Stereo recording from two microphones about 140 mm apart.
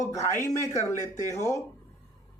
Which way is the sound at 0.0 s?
20° left (ahead or behind).